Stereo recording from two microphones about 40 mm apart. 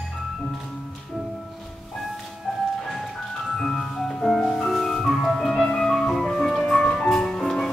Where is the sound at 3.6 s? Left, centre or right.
Centre.